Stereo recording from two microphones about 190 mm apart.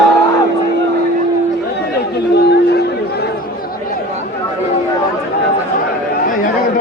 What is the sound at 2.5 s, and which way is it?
Chatter, 60° left (ahead or behind).